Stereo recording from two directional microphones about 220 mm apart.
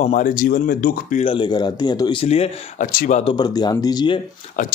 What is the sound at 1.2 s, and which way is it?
Speech, 20° left (ahead or behind).